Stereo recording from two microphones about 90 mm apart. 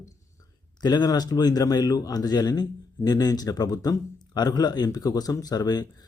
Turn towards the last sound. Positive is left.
turn(degrees=50)  # may be behind; listen again after turning